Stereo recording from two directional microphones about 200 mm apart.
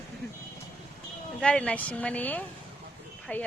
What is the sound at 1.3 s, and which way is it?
Speech, 5° left (ahead or behind).